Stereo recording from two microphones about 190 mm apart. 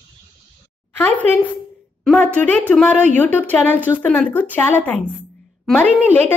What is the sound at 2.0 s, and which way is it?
A woman's voice, 5° left (ahead or behind).